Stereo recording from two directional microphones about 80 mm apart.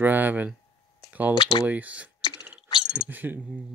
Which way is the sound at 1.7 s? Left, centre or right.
Centre.